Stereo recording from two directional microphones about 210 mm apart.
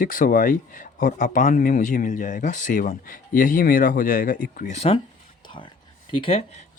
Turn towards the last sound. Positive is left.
turn(degrees=25)  # may be behind; listen again after turning